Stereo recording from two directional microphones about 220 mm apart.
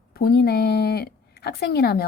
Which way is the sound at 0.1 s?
45° left (ahead or behind).